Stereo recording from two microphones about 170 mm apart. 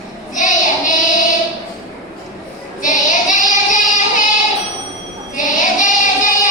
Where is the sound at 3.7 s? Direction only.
50° left (ahead or behind).